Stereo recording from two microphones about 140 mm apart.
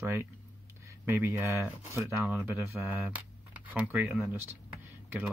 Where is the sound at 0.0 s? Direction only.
20° right (ahead or behind).